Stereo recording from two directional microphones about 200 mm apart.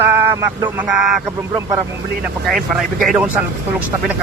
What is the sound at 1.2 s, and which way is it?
Speech, 15° right (ahead or behind).